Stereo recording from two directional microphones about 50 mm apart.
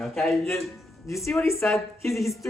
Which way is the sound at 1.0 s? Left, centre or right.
Left.